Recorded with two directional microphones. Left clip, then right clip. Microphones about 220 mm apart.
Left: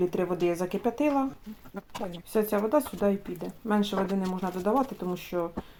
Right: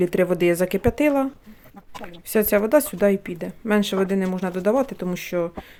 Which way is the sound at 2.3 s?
50° right (ahead or behind).